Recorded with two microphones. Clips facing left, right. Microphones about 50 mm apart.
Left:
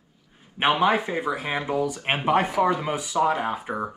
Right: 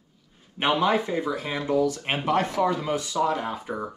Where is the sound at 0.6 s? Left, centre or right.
Centre.